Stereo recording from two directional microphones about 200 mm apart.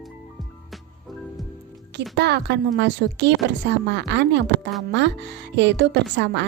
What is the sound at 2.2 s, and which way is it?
Speech, 55° right (ahead or behind).